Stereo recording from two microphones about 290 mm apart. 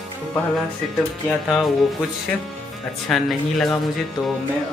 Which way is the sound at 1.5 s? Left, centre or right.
Centre.